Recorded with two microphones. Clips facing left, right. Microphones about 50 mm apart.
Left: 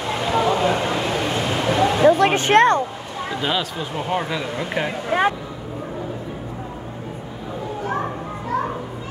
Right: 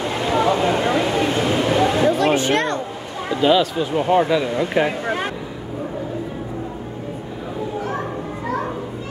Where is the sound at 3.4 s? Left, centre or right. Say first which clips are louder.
Right 9 dB; centre.